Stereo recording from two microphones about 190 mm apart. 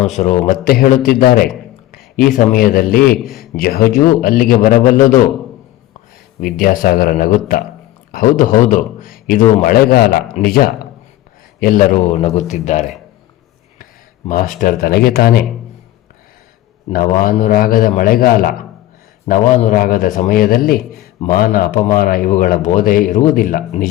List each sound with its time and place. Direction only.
0.0 s a man's voice: 40° left (ahead or behind)
6.4 s a man's voice: 45° left (ahead or behind)
10.4 s a man's voice: 40° left (ahead or behind)
11.6 s a man's voice: 45° left (ahead or behind)
14.3 s a man's voice: 45° left (ahead or behind)
16.9 s a man's voice: 45° left (ahead or behind)